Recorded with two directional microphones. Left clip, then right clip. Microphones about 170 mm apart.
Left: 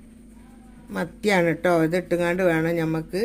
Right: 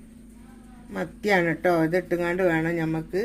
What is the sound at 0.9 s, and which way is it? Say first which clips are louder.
Speech: left 1 dB; 15° left (ahead or behind).